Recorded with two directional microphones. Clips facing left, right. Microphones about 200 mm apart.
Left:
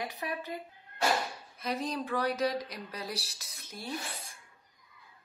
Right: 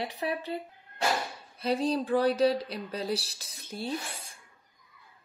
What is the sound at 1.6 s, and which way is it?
Speech, 30° right (ahead or behind).